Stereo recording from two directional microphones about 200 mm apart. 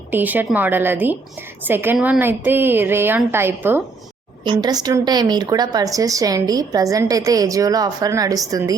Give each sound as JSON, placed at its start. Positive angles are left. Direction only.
{"t": 0.1, "sound": "a woman's voice", "side_deg": -10}